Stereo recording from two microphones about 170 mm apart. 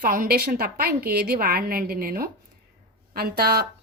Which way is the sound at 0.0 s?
55° right (ahead or behind).